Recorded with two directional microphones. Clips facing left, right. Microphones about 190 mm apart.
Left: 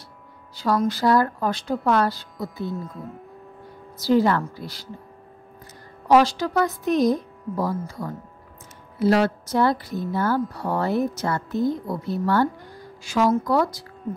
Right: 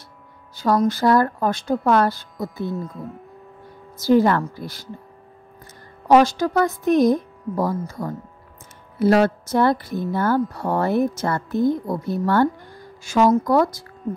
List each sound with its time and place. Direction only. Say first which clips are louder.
0.6 s speech: right 3 dB; 45° right (ahead or behind)
3.9 s speech: right 3 dB; 50° right (ahead or behind)
6.0 s speech: right 2 dB; 50° right (ahead or behind)
9.0 s speech: right 3 dB; 50° right (ahead or behind)